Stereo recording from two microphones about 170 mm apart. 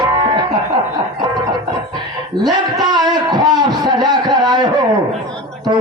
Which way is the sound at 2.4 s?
25° right (ahead or behind).